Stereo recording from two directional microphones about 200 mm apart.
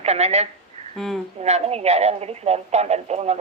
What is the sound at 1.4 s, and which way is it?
Speech, 35° right (ahead or behind).